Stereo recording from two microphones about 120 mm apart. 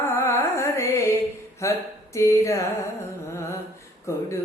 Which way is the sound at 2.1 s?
25° left (ahead or behind).